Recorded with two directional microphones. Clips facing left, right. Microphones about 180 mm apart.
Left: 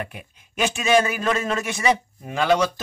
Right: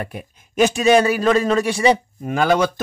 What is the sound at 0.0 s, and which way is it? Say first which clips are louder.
Speech: right 4 dB; 40° right (ahead or behind).